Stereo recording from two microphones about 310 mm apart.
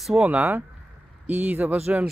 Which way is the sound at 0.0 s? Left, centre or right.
Centre.